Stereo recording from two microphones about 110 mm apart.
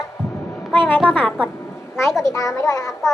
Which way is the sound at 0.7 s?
15° left (ahead or behind).